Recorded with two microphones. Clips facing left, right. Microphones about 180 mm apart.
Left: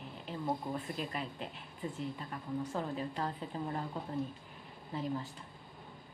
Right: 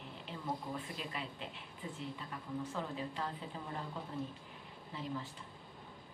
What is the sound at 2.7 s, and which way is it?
Speech, 45° left (ahead or behind).